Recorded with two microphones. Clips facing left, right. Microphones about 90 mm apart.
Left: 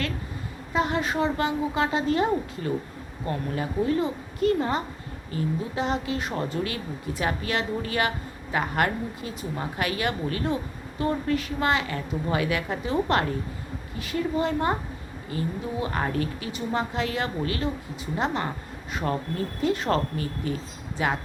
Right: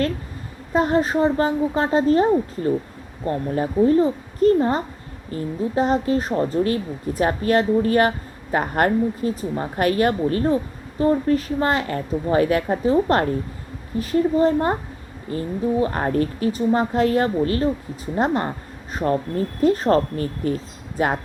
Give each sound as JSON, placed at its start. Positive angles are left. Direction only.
{"t": 0.7, "sound": "a woman's voice", "side_deg": -40}
{"t": 19.6, "sound": "a woman's voice", "side_deg": -40}